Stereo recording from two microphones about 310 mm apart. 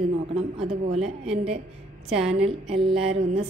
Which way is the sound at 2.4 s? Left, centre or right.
Centre.